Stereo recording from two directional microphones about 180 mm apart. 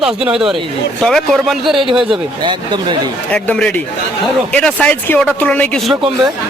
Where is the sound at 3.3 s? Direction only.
5° left (ahead or behind).